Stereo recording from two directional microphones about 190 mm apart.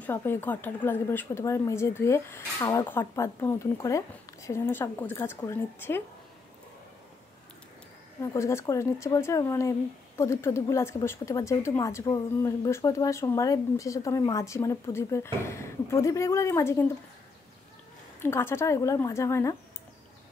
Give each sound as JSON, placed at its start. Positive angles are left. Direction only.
{"t": 0.0, "sound": "speech", "side_deg": 10}
{"t": 8.3, "sound": "speech", "side_deg": 15}
{"t": 18.2, "sound": "speech", "side_deg": 15}